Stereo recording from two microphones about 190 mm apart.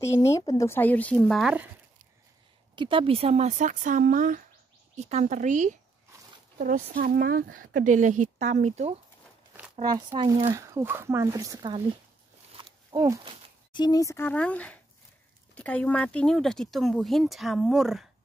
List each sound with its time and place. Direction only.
0.0 s speech: 15° left (ahead or behind); by 1.7 s 5° right (ahead or behind)
2.7 s speech: 25° right (ahead or behind)
9.8 s speech: 20° right (ahead or behind)
12.5 s a sound: 20° right (ahead or behind)
13.7 s speech: 20° left (ahead or behind); by 18.0 s centre (ahead or behind)